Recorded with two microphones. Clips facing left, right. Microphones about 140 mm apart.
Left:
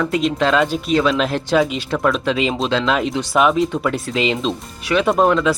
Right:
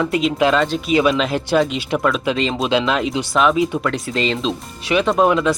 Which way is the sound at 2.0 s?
5° right (ahead or behind).